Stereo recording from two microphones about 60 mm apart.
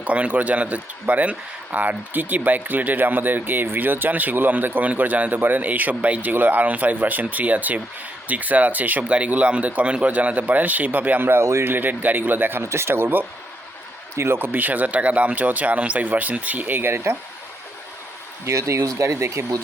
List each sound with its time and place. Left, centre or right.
0.0 s speech: right
12.6 s speech: right
18.4 s speech: right